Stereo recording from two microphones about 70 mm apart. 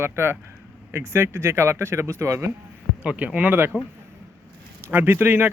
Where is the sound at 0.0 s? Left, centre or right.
Right.